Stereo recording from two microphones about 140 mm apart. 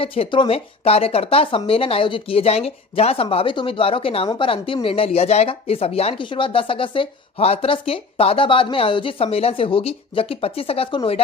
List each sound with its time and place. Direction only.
0.0 s speech: 40° left (ahead or behind)